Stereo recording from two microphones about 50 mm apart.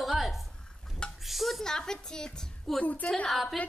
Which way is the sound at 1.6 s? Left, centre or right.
Centre.